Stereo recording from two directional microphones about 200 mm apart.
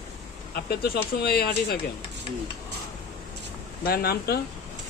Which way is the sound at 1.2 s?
50° left (ahead or behind).